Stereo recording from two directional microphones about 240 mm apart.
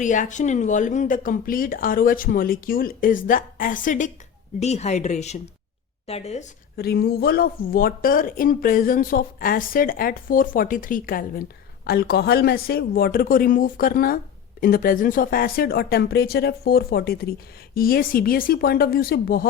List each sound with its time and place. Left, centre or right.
0.0 s speech: left